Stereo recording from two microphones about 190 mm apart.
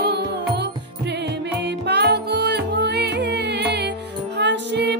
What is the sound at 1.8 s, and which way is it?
Music, 60° right (ahead or behind).